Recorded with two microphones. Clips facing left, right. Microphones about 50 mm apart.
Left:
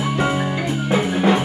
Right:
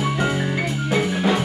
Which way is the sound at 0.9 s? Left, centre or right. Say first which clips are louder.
Left 3 dB; left.